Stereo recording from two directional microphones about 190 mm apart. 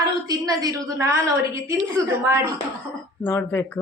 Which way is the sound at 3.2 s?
10° left (ahead or behind).